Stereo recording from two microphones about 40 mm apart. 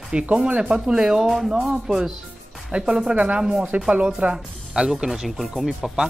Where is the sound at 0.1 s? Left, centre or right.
Right.